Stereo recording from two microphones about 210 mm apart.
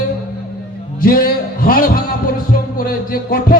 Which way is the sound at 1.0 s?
45° left (ahead or behind).